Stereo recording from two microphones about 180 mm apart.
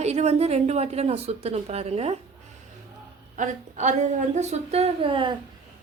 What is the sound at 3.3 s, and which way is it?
A woman's voice, 45° right (ahead or behind).